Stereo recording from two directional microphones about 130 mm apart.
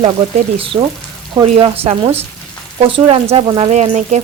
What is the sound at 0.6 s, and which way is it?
Speech, 45° right (ahead or behind).